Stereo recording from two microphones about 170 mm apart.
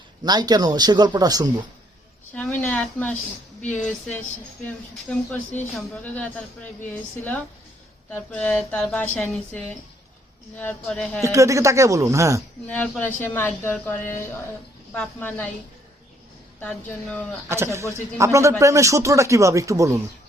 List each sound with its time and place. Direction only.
0.3 s speech: 25° right (ahead or behind)
2.3 s a woman's voice: 5° left (ahead or behind)
4.6 s a woman's voice: 10° left (ahead or behind)
8.1 s a woman's voice: 10° left (ahead or behind)
11.2 s speech: 15° right (ahead or behind)
12.6 s a woman's voice: 10° left (ahead or behind)
16.6 s a woman's voice: 5° left (ahead or behind)
17.5 s speech: 15° right (ahead or behind)